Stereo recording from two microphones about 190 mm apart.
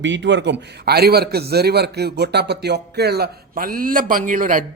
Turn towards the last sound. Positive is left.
turn(degrees=-45)  # may be behind; listen again after turning